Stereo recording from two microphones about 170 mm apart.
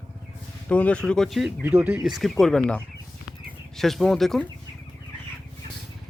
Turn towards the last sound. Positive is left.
turn(degrees=5)  # may be behind; listen again after turning